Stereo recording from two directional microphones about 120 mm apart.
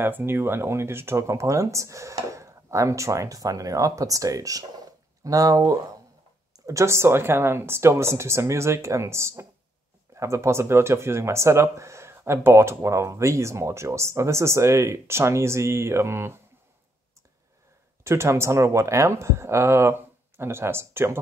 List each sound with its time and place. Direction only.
0.0 s speech: 20° right (ahead or behind)
18.0 s speech: 20° right (ahead or behind)